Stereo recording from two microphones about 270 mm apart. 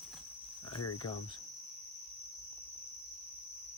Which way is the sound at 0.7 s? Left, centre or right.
Left.